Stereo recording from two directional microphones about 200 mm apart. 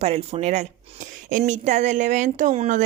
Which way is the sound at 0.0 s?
30° right (ahead or behind).